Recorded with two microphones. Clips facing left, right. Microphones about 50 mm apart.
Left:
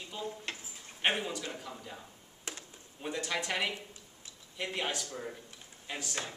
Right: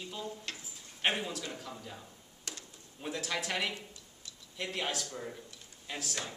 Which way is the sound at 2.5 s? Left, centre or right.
Left.